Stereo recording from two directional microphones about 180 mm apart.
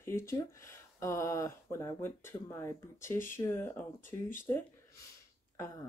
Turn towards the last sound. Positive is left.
turn(degrees=20)  # may be behind; listen again after turning